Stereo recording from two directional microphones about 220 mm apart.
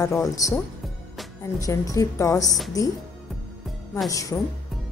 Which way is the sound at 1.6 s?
15° left (ahead or behind).